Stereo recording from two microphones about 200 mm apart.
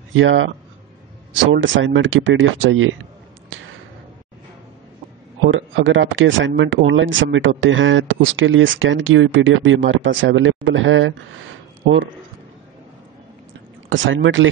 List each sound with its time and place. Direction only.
0.1 s speech: 70° right (ahead or behind)
5.5 s speech: 75° right (ahead or behind)
13.8 s speech: 75° right (ahead or behind)